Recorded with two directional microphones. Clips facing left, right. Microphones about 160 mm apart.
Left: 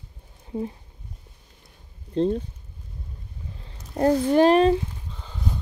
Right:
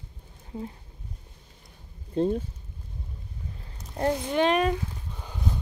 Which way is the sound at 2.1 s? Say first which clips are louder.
Left 2 dB; 5° right (ahead or behind).